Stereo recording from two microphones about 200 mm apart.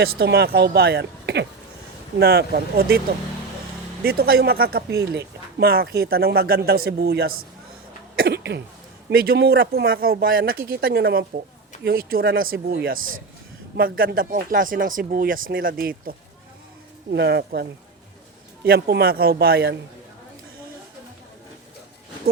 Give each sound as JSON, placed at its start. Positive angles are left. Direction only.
{"t": 0.2, "sound": "speech", "side_deg": -55}
{"t": 4.0, "sound": "speech", "side_deg": -50}
{"t": 8.1, "sound": "a sound", "side_deg": -50}
{"t": 9.0, "sound": "speech", "side_deg": -50}